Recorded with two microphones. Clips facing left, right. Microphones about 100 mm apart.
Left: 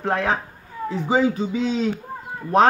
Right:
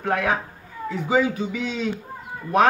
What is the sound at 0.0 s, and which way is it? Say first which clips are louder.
Speech: left 1 dB; 30° left (ahead or behind).